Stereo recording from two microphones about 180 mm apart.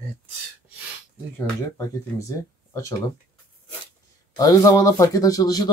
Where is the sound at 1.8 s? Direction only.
20° left (ahead or behind).